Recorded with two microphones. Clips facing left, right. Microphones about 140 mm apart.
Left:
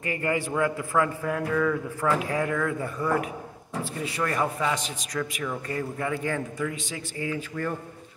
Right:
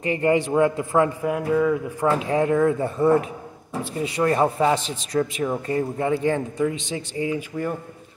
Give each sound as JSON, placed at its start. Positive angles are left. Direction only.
{"t": 0.0, "sound": "a man's voice", "side_deg": -25}